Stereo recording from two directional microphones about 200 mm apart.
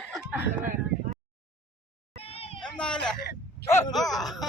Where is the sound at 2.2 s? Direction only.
30° left (ahead or behind).